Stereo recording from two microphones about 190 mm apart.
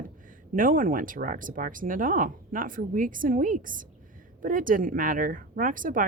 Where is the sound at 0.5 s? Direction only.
45° right (ahead or behind).